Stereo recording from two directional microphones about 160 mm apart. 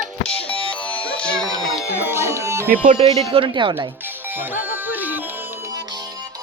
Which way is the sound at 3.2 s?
30° right (ahead or behind).